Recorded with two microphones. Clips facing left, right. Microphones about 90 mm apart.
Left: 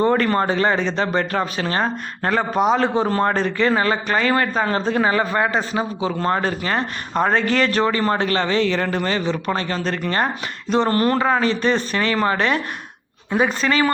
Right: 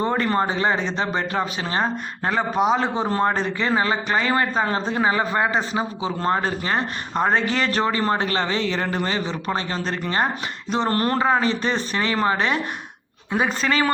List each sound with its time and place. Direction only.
0.0 s speech: 15° right (ahead or behind)
10.8 s speech: 35° right (ahead or behind)
13.3 s speech: 35° right (ahead or behind)